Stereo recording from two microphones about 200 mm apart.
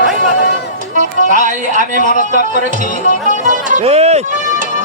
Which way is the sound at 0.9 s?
40° right (ahead or behind).